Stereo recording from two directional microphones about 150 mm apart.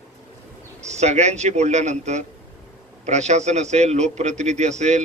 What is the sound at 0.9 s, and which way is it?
A man's voice, 50° right (ahead or behind).